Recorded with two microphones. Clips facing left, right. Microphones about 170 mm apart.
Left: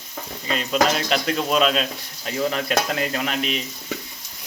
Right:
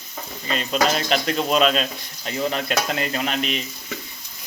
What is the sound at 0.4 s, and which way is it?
Speech, 5° left (ahead or behind).